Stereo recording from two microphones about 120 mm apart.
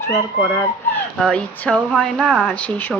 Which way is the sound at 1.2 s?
5° left (ahead or behind).